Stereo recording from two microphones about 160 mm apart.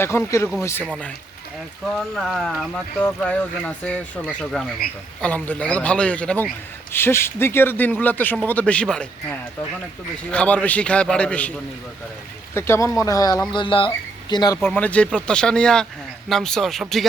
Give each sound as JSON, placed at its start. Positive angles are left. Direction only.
{"t": 0.0, "sound": "speech", "side_deg": 15}
{"t": 2.0, "sound": "speech", "side_deg": 0}
{"t": 10.3, "sound": "speech", "side_deg": 10}
{"t": 12.5, "sound": "speech", "side_deg": 15}
{"t": 14.6, "sound": "speech", "side_deg": 5}